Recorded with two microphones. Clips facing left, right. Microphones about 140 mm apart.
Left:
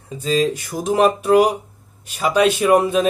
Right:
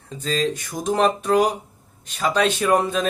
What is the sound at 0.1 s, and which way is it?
Speech, 10° left (ahead or behind).